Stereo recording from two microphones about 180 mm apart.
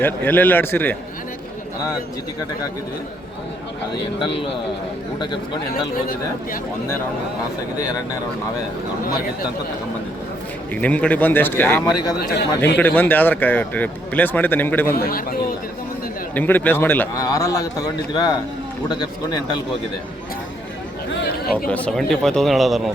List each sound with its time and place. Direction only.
0.0 s a man's voice: 10° left (ahead or behind)
10.8 s a man's voice: 10° left (ahead or behind)
14.9 s a man's voice: 55° left (ahead or behind)
16.3 s a man's voice: 10° left (ahead or behind)
21.7 s speech: 5° left (ahead or behind)